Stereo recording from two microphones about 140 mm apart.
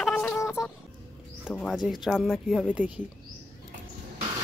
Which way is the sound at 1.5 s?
10° left (ahead or behind).